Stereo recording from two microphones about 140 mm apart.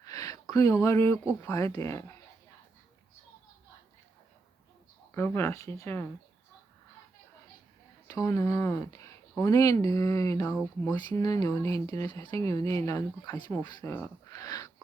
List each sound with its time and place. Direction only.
0.0 s a sound: 25° left (ahead or behind)
1.4 s speech: 25° left (ahead or behind)
5.1 s speech: 20° left (ahead or behind)
8.0 s speech: 25° left (ahead or behind)